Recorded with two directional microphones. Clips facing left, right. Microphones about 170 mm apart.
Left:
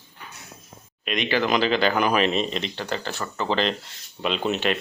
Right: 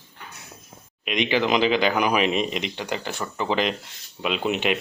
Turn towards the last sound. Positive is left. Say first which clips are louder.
# even
turn(degrees=-15)  # may be behind; listen again after turning